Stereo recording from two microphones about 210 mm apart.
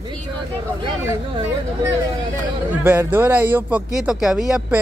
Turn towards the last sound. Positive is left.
turn(degrees=-5)  # may be behind; listen again after turning